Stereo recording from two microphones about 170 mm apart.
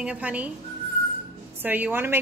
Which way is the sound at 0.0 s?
5° right (ahead or behind).